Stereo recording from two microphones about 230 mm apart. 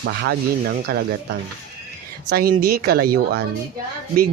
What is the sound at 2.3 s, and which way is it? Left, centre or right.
Speech, right.